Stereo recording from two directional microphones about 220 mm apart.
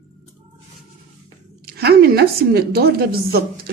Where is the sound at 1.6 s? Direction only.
45° right (ahead or behind).